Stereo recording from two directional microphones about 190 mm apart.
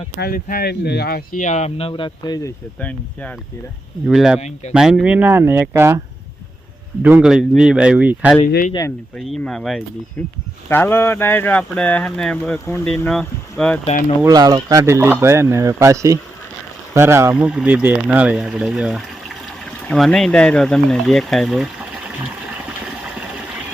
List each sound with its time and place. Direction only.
0.2 s speech: 50° left (ahead or behind); by 2.5 s 20° left (ahead or behind)
2.8 s speech: 5° left (ahead or behind)
4.0 s speech: 5° right (ahead or behind)
4.4 s speech: 35° left (ahead or behind)
4.7 s speech: 5° right (ahead or behind)
7.0 s speech: 5° right (ahead or behind)
8.4 s speech: 50° left (ahead or behind)
9.1 s speech: centre (ahead or behind)
14.3 s speech: 20° right (ahead or behind); by 21.7 s centre (ahead or behind)